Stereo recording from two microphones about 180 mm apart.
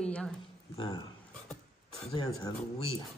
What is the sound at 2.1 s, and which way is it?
Speech, 20° left (ahead or behind).